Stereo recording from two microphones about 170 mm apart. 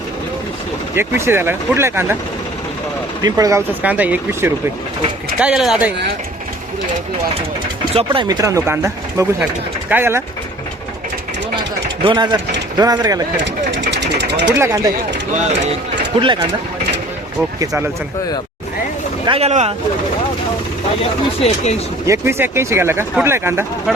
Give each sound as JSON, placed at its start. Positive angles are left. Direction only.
{"t": 0.9, "sound": "speech", "side_deg": -15}
{"t": 3.2, "sound": "speech", "side_deg": -20}
{"t": 3.8, "sound": "speech", "side_deg": -10}
{"t": 7.9, "sound": "speech", "side_deg": -30}
{"t": 12.0, "sound": "speech", "side_deg": -25}
{"t": 13.3, "sound": "sewing machine", "side_deg": -90}
{"t": 14.6, "sound": "speech", "side_deg": -15}
{"t": 15.4, "sound": "speech", "side_deg": -45}
{"t": 16.1, "sound": "speech", "side_deg": -30}
{"t": 17.6, "sound": "speech", "side_deg": -15}
{"t": 19.2, "sound": "speech", "side_deg": -35}
{"t": 21.0, "sound": "speech", "side_deg": 40}
{"t": 22.0, "sound": "speech", "side_deg": -15}